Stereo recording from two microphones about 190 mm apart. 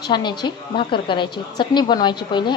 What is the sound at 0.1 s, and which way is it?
A woman's voice, 25° left (ahead or behind).